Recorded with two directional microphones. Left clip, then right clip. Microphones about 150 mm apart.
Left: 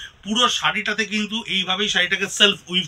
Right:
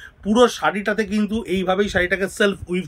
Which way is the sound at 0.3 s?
60° right (ahead or behind).